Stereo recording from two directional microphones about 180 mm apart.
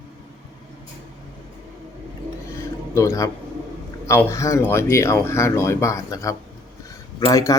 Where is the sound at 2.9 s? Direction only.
15° left (ahead or behind).